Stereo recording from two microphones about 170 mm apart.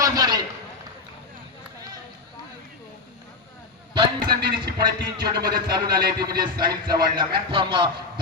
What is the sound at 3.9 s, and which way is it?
Speech, 25° right (ahead or behind).